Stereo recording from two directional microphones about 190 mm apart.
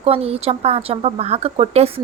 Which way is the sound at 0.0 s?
30° right (ahead or behind).